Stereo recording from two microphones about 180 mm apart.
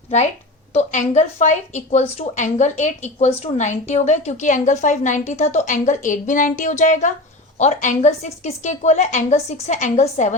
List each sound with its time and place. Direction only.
0.7 s speech: 40° left (ahead or behind)